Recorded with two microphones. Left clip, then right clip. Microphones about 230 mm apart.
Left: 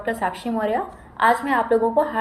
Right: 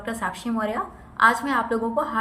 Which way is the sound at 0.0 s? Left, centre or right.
Centre.